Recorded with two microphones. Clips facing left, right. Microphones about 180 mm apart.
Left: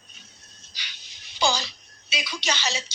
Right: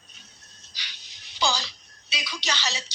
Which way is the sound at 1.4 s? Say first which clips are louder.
Left 2 dB; 20° left (ahead or behind).